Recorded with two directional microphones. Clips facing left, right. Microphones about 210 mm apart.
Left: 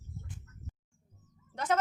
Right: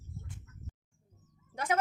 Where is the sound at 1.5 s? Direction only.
10° right (ahead or behind).